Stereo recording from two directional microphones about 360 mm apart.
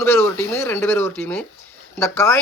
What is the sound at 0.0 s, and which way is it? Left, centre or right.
Speech, centre.